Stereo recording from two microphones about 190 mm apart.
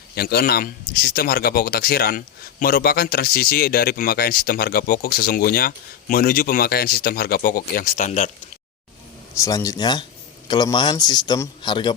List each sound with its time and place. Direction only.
0.2 s speech: 55° left (ahead or behind); by 8.3 s 40° left (ahead or behind)
9.4 s a man's voice: 15° left (ahead or behind)